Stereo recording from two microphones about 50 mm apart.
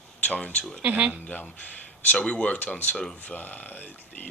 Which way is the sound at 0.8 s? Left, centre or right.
Right.